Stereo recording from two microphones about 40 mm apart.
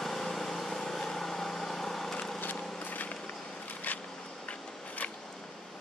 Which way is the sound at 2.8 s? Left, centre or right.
Left.